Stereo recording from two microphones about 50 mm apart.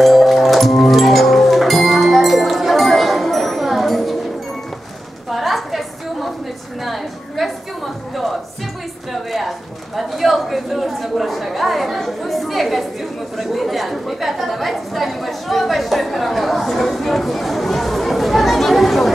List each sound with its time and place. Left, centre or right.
0.0 s music: centre
5.3 s a sound: centre
13.4 s chatter: centre